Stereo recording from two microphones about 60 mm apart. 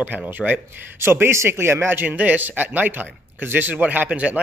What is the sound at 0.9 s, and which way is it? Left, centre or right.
A man's voice, right.